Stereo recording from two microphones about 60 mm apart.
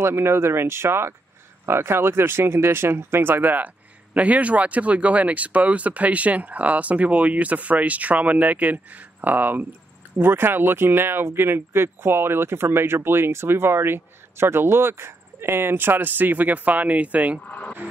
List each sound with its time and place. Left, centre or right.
0.0 s speech: right
17.5 s speech: left